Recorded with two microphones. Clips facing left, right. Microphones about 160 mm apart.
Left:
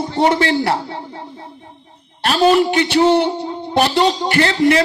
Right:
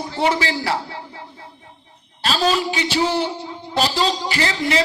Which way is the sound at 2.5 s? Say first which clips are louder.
Left 7 dB; 60° left (ahead or behind).